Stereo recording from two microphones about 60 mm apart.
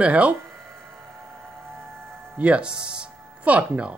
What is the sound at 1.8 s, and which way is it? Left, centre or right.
Music, right.